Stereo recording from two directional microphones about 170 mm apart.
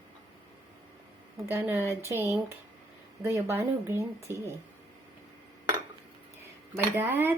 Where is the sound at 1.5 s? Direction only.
10° right (ahead or behind).